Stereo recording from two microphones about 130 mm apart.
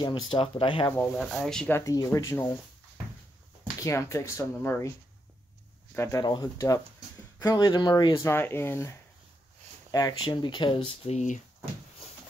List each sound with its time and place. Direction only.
0.0 s speech: 40° left (ahead or behind)
0.9 s speech: 5° left (ahead or behind)
1.7 s speech: 25° left (ahead or behind)
3.8 s speech: 25° left (ahead or behind)
5.9 s speech: 30° left (ahead or behind)
8.2 s speech: 20° left (ahead or behind)
9.8 s a sound: 30° left (ahead or behind)
10.2 s speech: 35° left (ahead or behind); by 11.4 s 65° left (ahead or behind)